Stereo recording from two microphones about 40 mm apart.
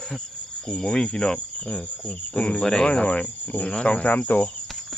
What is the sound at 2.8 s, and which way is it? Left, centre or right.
Cricket, left.